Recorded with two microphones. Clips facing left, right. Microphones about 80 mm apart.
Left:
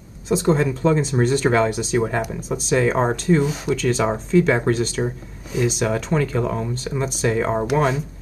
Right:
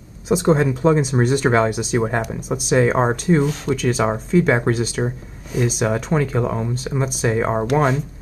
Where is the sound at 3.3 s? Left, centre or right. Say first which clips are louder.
Right 1 dB; centre.